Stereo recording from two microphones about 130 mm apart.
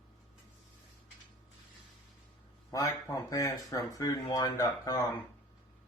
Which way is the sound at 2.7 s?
25° left (ahead or behind).